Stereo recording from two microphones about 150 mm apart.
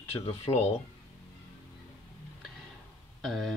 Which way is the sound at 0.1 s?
40° left (ahead or behind).